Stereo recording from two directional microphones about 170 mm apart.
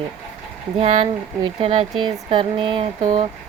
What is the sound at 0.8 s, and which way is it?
Speech, 35° right (ahead or behind).